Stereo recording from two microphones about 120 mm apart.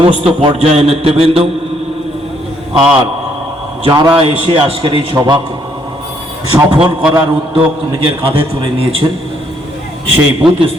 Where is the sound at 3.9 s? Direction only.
40° right (ahead or behind).